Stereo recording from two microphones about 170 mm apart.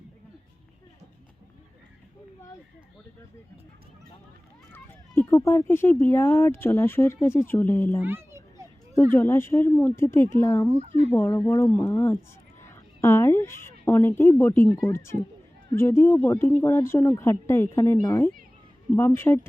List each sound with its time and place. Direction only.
4.7 s speech: 15° left (ahead or behind)
8.0 s children playing: 15° right (ahead or behind)
9.1 s speech: 15° left (ahead or behind)
10.8 s speech: 40° right (ahead or behind)
11.1 s a woman's voice: 15° left (ahead or behind)